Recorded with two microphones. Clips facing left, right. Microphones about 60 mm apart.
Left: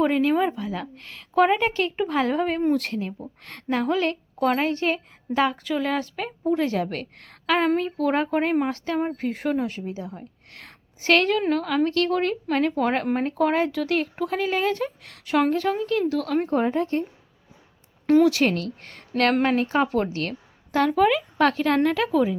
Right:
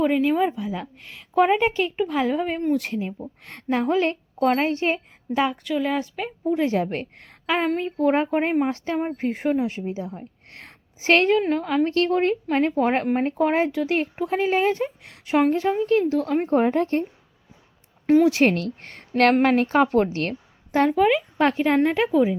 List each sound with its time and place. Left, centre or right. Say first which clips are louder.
0.0 s a woman's voice: right 1 dB; centre
3.5 s speech: right 2 dB; right
4.4 s speech: right 2 dB; centre
5.3 s speech: even; centre
6.6 s a woman's voice: right 2 dB; right
9.0 s a woman's voice: even; centre
9.2 s speech: right 2 dB; right
10.5 s a sound: right 1 dB; right
11.3 s a woman's voice: right 1 dB; centre; by 17.1 s right
18.0 s speech: even; centre
18.3 s a woman's voice: right 3 dB; right
20.9 s a woman's voice: right 1 dB; centre